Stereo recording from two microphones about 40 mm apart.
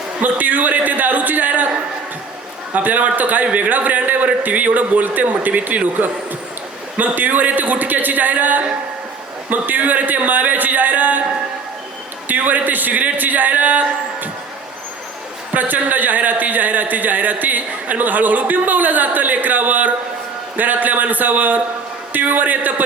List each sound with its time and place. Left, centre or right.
0.2 s a man's voice: right
2.7 s a man's voice: right
12.3 s a man's voice: right
15.5 s a man's voice: right